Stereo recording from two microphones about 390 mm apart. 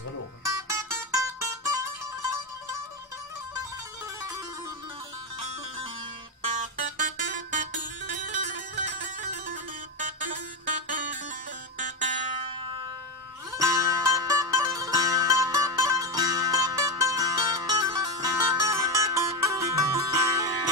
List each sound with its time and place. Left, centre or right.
0.7 s music: centre
6.8 s music: centre